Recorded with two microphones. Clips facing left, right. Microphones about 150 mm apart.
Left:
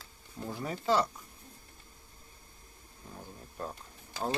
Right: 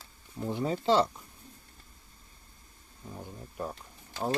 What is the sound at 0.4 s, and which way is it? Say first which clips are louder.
Speech: right 5 dB; 25° right (ahead or behind).